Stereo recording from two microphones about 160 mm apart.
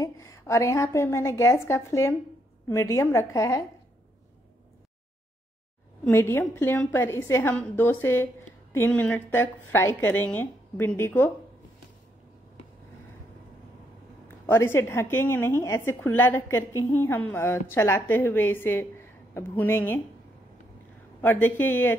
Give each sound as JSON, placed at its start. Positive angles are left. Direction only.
{"t": 0.0, "sound": "a woman's voice", "side_deg": 20}
{"t": 6.0, "sound": "a woman's voice", "side_deg": 15}
{"t": 14.4, "sound": "a woman's voice", "side_deg": 15}
{"t": 21.2, "sound": "a woman's voice", "side_deg": 10}